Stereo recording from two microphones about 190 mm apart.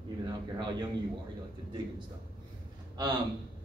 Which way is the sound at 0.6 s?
25° right (ahead or behind).